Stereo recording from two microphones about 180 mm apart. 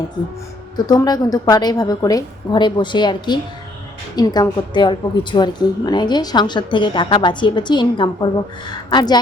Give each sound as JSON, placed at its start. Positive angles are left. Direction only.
{"t": 0.9, "sound": "a woman's voice", "side_deg": 20}